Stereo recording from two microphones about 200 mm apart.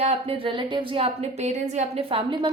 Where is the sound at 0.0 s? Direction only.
30° right (ahead or behind).